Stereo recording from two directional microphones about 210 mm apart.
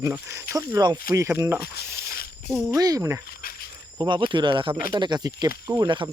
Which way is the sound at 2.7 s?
15° right (ahead or behind).